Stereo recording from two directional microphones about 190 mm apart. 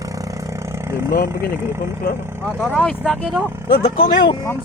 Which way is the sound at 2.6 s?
5° left (ahead or behind).